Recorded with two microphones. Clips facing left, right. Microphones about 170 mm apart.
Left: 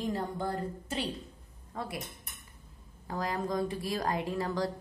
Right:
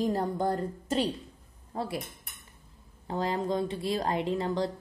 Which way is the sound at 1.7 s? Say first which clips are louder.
Right 5 dB; 30° right (ahead or behind).